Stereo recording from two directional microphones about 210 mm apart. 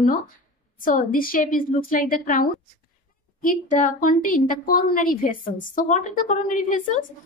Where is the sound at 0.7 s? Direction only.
40° left (ahead or behind).